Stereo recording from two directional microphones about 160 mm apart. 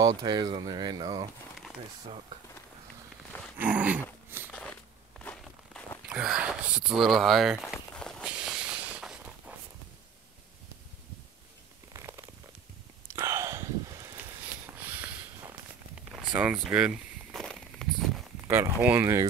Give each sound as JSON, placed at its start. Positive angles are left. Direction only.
{"t": 0.2, "sound": "speech", "side_deg": -25}
{"t": 3.5, "sound": "speech", "side_deg": -10}
{"t": 4.5, "sound": "a sound", "side_deg": 5}
{"t": 5.2, "sound": "walk", "side_deg": 5}
{"t": 6.0, "sound": "speech", "side_deg": -5}
{"t": 7.9, "sound": "walk", "side_deg": 5}
{"t": 11.9, "sound": "a sound", "side_deg": -20}
{"t": 14.8, "sound": "a sound", "side_deg": -10}
{"t": 16.3, "sound": "walk", "side_deg": -10}
{"t": 18.5, "sound": "speech", "side_deg": -10}